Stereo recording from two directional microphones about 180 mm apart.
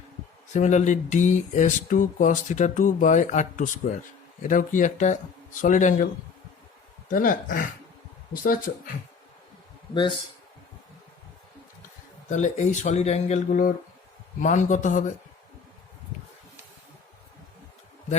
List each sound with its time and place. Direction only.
0.5 s speech: 40° left (ahead or behind)
7.1 s speech: 50° left (ahead or behind)
9.9 s a man's voice: 25° left (ahead or behind)
12.3 s speech: 45° left (ahead or behind)